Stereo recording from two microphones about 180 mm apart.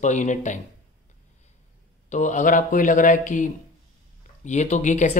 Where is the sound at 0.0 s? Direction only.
40° left (ahead or behind).